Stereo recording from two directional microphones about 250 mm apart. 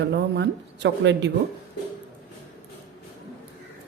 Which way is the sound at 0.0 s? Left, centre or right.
Right.